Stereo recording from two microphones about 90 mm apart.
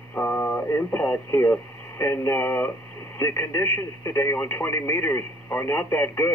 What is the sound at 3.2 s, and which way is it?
Radio, 25° left (ahead or behind).